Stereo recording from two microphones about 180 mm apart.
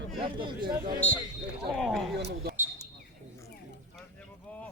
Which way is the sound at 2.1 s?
65° right (ahead or behind).